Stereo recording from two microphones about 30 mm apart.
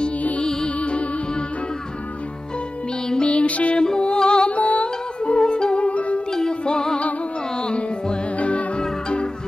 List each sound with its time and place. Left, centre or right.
0.4 s music: left
0.7 s music: left
3.3 s music: left
3.7 s music: left
4.5 s music: left
4.8 s music: left
5.8 s music: left
6.6 s music: left
8.4 s music: left